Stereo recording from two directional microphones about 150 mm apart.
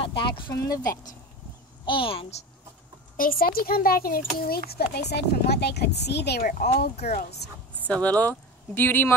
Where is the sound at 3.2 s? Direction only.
75° left (ahead or behind).